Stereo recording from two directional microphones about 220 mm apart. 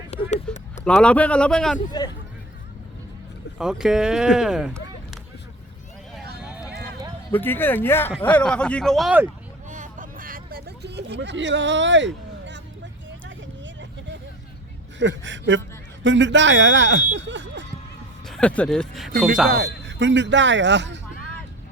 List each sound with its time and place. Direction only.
0.1 s a sound: 30° left (ahead or behind)
0.9 s speech: 5° left (ahead or behind)
3.6 s speech: centre (ahead or behind)
6.4 s a sound: 5° right (ahead or behind)
7.3 s speech: 10° left (ahead or behind)
9.6 s a sound: 35° right (ahead or behind); by 12.6 s 55° right (ahead or behind)
13.1 s vehicle: 55° right (ahead or behind)
14.9 s speech: 55° right (ahead or behind)
18.3 s speech: 5° left (ahead or behind)
19.5 s speech: 50° right (ahead or behind)